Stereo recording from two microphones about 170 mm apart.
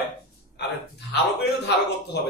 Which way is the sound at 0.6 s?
80° left.